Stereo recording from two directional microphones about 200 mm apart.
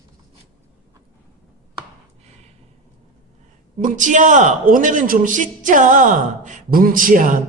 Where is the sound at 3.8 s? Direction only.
40° right (ahead or behind).